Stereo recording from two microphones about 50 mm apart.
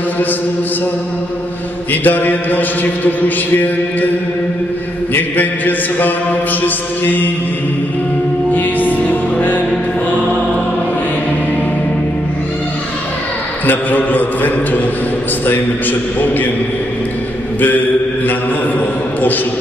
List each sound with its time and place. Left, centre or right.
1.9 s mantra: left
5.1 s mantra: left
8.5 s music: left
13.7 s mantra: left